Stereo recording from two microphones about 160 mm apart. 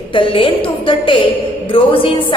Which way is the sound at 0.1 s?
30° left (ahead or behind).